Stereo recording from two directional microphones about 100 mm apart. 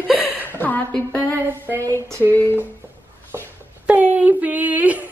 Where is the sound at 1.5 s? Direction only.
20° right (ahead or behind).